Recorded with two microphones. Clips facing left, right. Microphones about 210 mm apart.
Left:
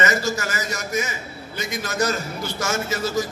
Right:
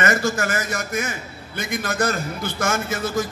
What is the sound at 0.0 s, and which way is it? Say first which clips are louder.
A man's voice: right 2 dB; 55° right (ahead or behind).